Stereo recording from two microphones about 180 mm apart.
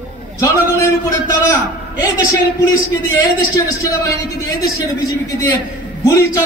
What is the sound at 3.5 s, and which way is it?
A man's voice, 20° left (ahead or behind).